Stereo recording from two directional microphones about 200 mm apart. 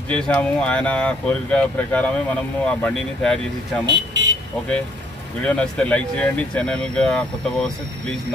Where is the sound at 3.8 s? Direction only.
60° right (ahead or behind).